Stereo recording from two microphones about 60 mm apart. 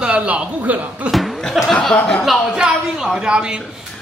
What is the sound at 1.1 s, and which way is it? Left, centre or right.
A man's voice, centre.